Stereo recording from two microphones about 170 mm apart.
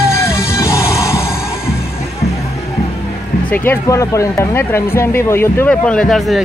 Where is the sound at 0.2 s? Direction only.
15° left (ahead or behind).